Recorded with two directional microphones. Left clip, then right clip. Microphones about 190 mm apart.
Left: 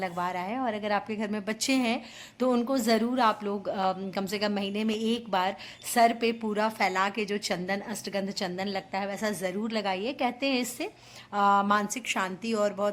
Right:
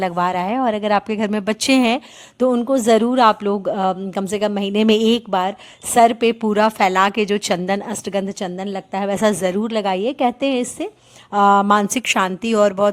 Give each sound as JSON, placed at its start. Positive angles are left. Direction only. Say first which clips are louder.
{"t": 0.0, "sound": "a woman's voice", "louder": "right 12 dB", "side_deg": -45}
{"t": 2.4, "sound": "speech", "louder": "right 10 dB", "side_deg": -35}
{"t": 5.3, "sound": "a woman's voice", "louder": "right 8 dB", "side_deg": -35}
{"t": 11.9, "sound": "a woman's voice", "louder": "right 12 dB", "side_deg": -60}